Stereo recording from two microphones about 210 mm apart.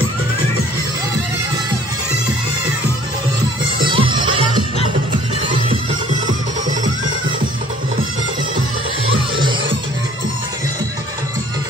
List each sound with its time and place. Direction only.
3.8 s music: 25° right (ahead or behind)
9.1 s music: 20° right (ahead or behind)